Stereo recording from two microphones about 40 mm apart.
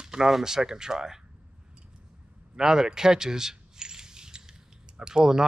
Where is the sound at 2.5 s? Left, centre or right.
Centre.